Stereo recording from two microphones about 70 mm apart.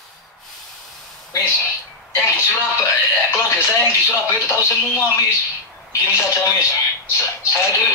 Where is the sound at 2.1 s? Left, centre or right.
Left.